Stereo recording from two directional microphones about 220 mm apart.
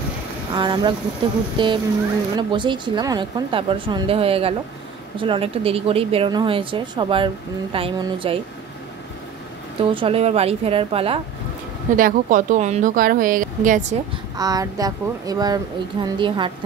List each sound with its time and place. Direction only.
0.6 s speech: 20° right (ahead or behind)
9.8 s speech: 25° right (ahead or behind)
11.9 s a woman's voice: 35° right (ahead or behind)
14.3 s speech: 15° right (ahead or behind)